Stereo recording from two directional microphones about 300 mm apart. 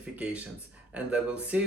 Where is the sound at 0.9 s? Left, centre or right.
Centre.